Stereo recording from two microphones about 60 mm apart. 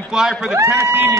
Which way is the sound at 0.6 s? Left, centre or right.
Right.